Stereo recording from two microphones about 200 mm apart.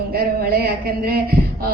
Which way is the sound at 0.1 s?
50° right (ahead or behind).